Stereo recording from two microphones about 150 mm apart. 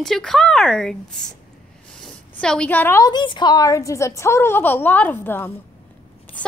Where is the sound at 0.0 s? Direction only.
Centre (ahead or behind).